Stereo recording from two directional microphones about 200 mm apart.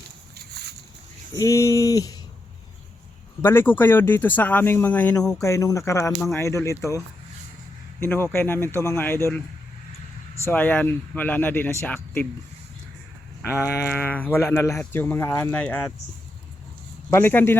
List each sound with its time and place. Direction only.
1.3 s speech: 15° left (ahead or behind)
3.4 s speech: 10° left (ahead or behind)
8.0 s speech: 10° left (ahead or behind)
10.4 s speech: 10° left (ahead or behind)
13.4 s speech: 15° left (ahead or behind)
17.1 s speech: 10° left (ahead or behind)